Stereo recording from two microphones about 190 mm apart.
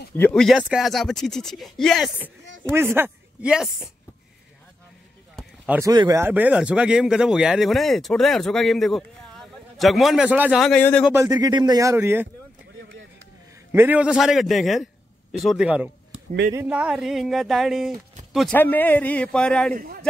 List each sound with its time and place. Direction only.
0.1 s speech: 10° left (ahead or behind)
5.7 s speech: 20° right (ahead or behind); by 11.1 s 5° left (ahead or behind)
11.1 s speech: 10° right (ahead or behind)
13.7 s speech: 10° right (ahead or behind)
18.5 s a man's voice: 10° left (ahead or behind)
19.7 s speech: 50° right (ahead or behind)